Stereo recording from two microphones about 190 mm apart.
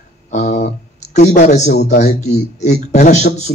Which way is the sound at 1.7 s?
55° left (ahead or behind).